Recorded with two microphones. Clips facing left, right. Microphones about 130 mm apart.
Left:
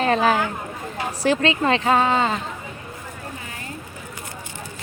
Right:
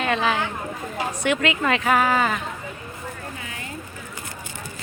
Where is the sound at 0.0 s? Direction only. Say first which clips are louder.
Left 4 dB; 40° left (ahead or behind).